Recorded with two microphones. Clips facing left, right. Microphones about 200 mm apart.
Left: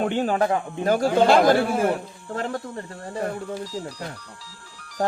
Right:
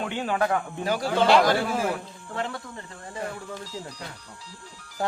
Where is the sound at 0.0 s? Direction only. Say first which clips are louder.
Left 6 dB; 45° left (ahead or behind).